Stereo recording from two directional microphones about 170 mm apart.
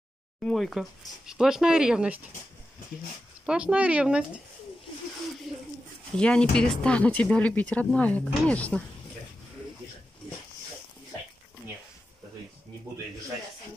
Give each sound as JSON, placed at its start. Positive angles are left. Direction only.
{"t": 0.4, "sound": "speech", "side_deg": 0}
{"t": 3.4, "sound": "speech", "side_deg": -5}
{"t": 6.1, "sound": "speech", "side_deg": 5}